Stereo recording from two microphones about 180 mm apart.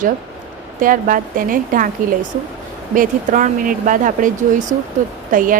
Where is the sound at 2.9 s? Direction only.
45° right (ahead or behind).